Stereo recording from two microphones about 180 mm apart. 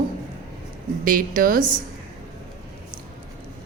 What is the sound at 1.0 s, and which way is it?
Speech, 50° right (ahead or behind).